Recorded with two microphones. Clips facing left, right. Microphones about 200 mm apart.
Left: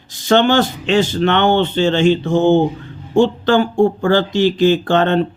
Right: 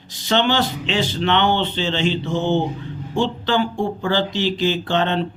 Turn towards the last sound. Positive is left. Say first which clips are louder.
# left 6 dB
turn(degrees=50)  # may be behind; listen again after turning